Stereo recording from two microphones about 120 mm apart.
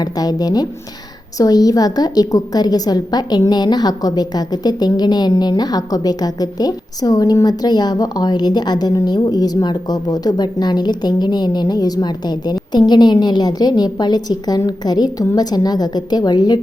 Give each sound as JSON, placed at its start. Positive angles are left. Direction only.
{"t": 0.0, "sound": "a woman's voice", "side_deg": 35}